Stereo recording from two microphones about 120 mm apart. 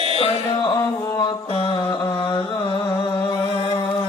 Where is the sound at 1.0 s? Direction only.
30° left (ahead or behind).